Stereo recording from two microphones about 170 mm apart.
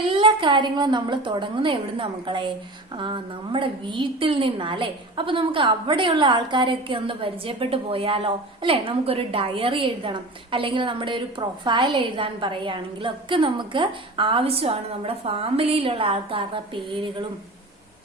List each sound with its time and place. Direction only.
0.1 s a woman's voice: 30° right (ahead or behind)